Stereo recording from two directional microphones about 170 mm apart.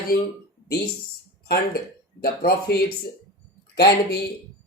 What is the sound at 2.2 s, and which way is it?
Speech, 65° left (ahead or behind).